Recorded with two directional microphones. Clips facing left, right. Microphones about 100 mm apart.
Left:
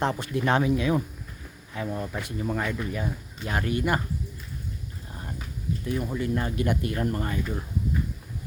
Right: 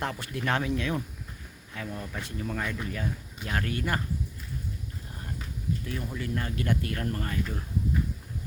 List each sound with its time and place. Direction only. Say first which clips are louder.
0.0 s speech: left 6 dB; 20° left (ahead or behind)
1.7 s speech: left 6 dB; 25° left (ahead or behind)
5.8 s speech: left 6 dB; 20° left (ahead or behind)